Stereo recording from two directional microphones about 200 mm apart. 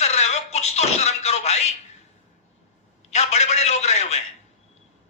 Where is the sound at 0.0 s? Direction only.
35° left (ahead or behind).